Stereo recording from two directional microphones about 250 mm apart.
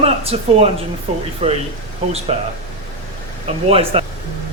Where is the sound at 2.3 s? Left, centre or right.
Right.